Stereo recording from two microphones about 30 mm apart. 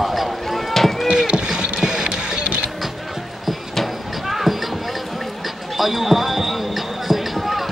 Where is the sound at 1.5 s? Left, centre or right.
Right.